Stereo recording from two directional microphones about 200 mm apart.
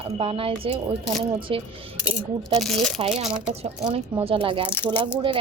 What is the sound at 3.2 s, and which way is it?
Speech, 35° right (ahead or behind).